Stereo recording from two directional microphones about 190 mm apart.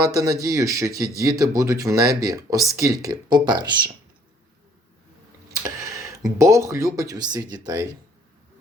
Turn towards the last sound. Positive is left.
turn(degrees=-20)  # may be behind; listen again after turning